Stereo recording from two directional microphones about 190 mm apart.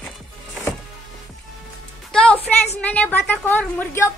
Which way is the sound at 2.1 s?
5° left (ahead or behind).